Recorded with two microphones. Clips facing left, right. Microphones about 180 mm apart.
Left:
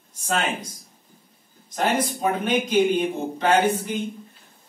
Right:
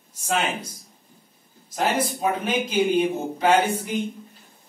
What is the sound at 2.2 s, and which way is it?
Speech, 5° right (ahead or behind).